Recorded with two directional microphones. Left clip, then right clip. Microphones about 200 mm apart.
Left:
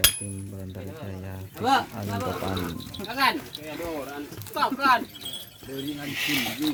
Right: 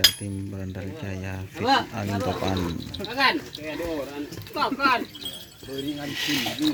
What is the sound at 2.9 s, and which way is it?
Speech, 50° left (ahead or behind).